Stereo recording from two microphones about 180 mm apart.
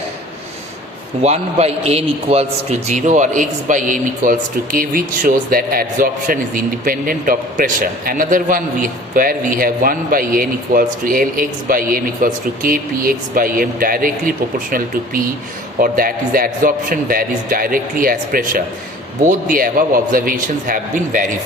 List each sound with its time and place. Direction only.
1.2 s a man's voice: 35° right (ahead or behind)